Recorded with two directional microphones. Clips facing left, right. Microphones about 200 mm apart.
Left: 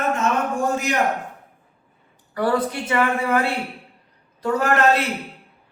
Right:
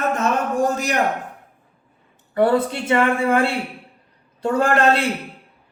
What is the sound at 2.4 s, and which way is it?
A man's voice, 25° right (ahead or behind).